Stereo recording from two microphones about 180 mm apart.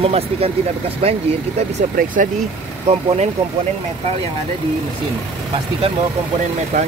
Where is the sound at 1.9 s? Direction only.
45° right (ahead or behind).